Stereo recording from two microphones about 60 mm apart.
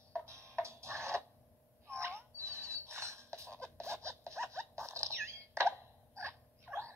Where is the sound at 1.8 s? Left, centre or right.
Right.